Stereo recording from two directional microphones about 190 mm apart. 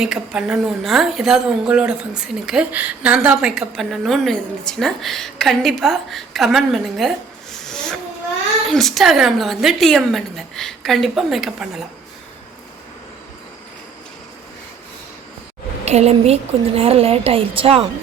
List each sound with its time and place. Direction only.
0.0 s a woman's voice: 5° right (ahead or behind)
7.5 s a sound: 5° left (ahead or behind)
8.7 s a woman's voice: centre (ahead or behind)
15.8 s speech: 35° right (ahead or behind)